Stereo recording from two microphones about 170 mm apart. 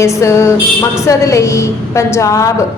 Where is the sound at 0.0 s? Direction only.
15° left (ahead or behind).